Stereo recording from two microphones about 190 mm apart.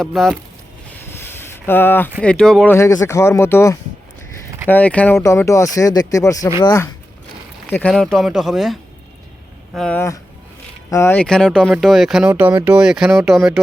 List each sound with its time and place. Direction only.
0.0 s speech: centre (ahead or behind)
1.2 s a sound: 10° left (ahead or behind)
2.2 s speech: 5° left (ahead or behind)
2.7 s speech: 15° left (ahead or behind)
7.9 s speech: centre (ahead or behind)